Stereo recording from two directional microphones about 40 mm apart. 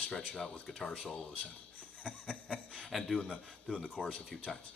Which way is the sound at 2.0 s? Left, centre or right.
Centre.